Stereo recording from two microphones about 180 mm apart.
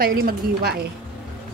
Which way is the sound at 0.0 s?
55° right (ahead or behind).